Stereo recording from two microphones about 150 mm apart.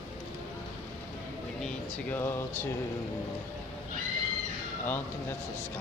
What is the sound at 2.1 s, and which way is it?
Speech, 15° left (ahead or behind).